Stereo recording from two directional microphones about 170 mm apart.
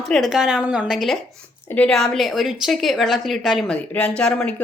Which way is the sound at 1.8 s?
Centre (ahead or behind).